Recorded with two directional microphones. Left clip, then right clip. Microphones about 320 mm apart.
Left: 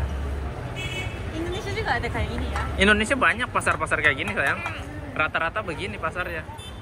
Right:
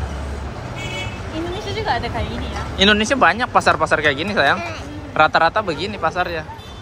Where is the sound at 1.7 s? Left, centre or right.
Centre.